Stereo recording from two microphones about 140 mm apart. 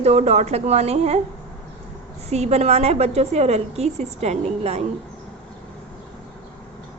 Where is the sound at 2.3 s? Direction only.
50° right (ahead or behind).